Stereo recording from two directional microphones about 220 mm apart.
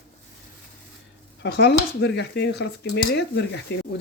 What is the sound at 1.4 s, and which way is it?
Speech, 50° left (ahead or behind).